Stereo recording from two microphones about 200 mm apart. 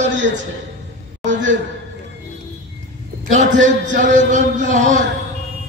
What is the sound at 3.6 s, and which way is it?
A man's voice, 40° right (ahead or behind).